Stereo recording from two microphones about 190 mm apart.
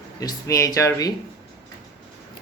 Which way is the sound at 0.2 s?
15° left (ahead or behind).